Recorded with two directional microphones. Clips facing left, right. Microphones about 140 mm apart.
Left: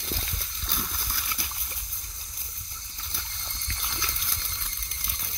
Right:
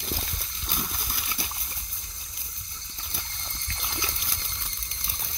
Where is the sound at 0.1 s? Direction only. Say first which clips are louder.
Even; 10° right (ahead or behind).